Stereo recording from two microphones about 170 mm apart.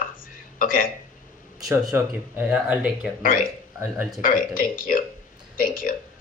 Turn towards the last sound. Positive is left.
turn(degrees=55)  # may be behind; listen again after turning